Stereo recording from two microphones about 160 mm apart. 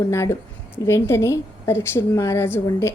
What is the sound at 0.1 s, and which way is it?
A woman's voice, 15° left (ahead or behind).